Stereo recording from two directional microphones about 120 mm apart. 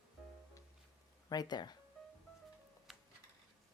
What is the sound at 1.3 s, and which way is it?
Speech, 35° left (ahead or behind).